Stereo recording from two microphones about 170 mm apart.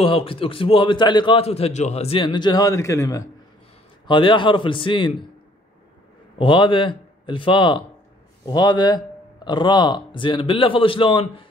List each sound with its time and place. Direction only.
0.0 s a man's voice: 35° left (ahead or behind)
6.3 s speech: 30° left (ahead or behind)